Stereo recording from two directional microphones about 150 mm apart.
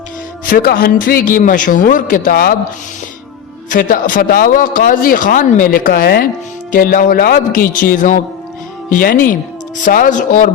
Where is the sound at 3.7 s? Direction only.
65° left (ahead or behind); by 6.3 s 80° left.